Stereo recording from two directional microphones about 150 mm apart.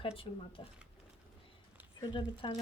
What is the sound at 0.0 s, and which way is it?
Speech, 35° left (ahead or behind).